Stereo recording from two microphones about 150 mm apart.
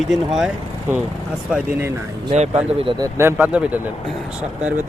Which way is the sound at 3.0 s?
20° right (ahead or behind).